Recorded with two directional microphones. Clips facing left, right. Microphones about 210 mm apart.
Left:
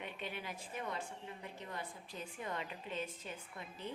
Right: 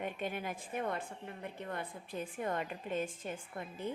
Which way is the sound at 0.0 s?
50° right (ahead or behind).